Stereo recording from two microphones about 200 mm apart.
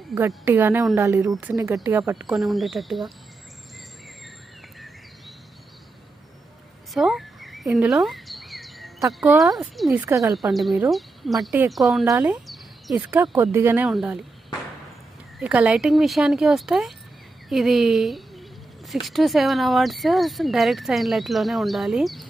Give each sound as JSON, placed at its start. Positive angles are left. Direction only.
{"t": 0.3, "sound": "speech", "side_deg": -10}
{"t": 1.3, "sound": "speech", "side_deg": 0}
{"t": 1.6, "sound": "speech", "side_deg": -15}
{"t": 2.3, "sound": "speech", "side_deg": 0}
{"t": 6.9, "sound": "a sound", "side_deg": 0}
{"t": 9.2, "sound": "speech", "side_deg": -5}
{"t": 10.0, "sound": "speech", "side_deg": -15}
{"t": 10.3, "sound": "speech", "side_deg": 0}
{"t": 12.1, "sound": "speech", "side_deg": -15}
{"t": 12.4, "sound": "a sound", "side_deg": 0}
{"t": 13.1, "sound": "speech", "side_deg": -10}
{"t": 15.3, "sound": "a woman's voice", "side_deg": -5}